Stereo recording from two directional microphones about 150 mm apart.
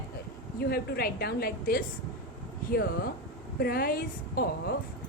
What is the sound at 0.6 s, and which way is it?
Speech, 90° left.